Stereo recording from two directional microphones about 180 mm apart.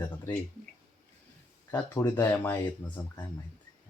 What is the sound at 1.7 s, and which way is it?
Speech, 15° left (ahead or behind).